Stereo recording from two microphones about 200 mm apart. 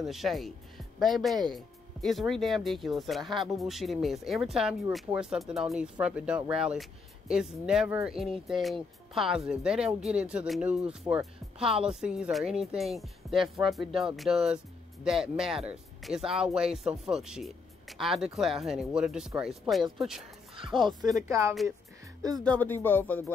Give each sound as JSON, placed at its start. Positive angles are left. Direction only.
{"t": 0.0, "sound": "speech", "side_deg": 0}
{"t": 20.5, "sound": "speech", "side_deg": -25}
{"t": 22.4, "sound": "speech", "side_deg": 5}